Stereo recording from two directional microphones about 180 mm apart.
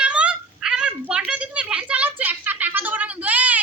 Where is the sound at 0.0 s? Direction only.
5° right (ahead or behind).